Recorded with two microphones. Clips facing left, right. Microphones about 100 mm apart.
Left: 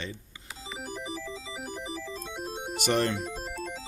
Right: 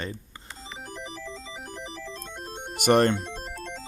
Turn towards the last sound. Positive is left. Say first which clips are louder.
# left 1 dB
turn(degrees=5)  # may be behind; listen again after turning